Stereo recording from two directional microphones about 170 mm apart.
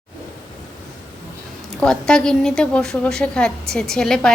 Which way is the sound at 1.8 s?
5° left (ahead or behind).